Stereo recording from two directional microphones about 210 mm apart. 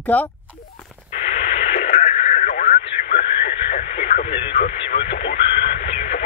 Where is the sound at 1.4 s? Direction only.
30° left (ahead or behind).